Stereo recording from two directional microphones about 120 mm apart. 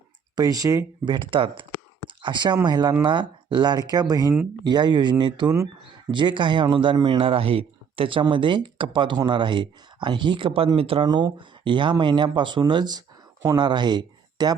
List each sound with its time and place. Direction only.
0.3 s speech: 30° right (ahead or behind)
1.0 s speech: 40° right (ahead or behind)
11.0 s speech: 35° right (ahead or behind)